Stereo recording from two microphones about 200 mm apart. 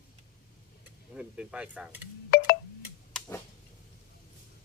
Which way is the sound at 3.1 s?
10° left (ahead or behind).